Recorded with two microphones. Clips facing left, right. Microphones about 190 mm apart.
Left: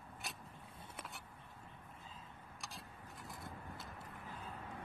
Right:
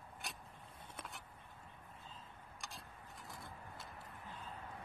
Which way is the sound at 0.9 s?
Centre (ahead or behind).